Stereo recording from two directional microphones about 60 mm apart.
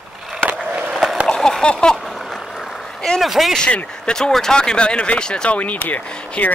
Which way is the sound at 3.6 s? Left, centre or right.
Centre.